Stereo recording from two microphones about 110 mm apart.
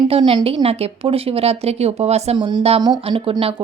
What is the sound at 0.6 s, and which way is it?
Speech, 65° right (ahead or behind).